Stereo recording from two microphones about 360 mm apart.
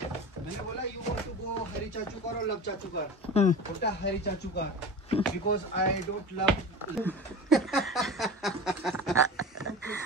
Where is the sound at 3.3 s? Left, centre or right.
Left.